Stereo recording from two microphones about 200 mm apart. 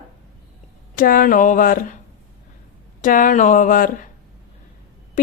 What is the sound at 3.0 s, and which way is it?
Speech, 40° left (ahead or behind).